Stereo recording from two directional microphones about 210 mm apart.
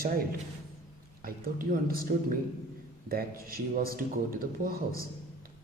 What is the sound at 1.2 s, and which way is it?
A man's voice, 45° right (ahead or behind).